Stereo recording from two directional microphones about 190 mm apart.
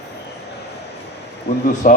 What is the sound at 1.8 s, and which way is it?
Speech, 45° left (ahead or behind).